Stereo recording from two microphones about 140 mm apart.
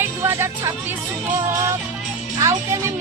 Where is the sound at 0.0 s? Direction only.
20° right (ahead or behind).